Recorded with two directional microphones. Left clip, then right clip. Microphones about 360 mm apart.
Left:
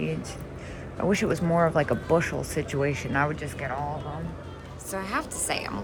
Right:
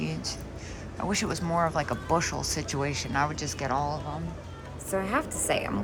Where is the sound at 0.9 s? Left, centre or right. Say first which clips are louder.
Left 5 dB; centre.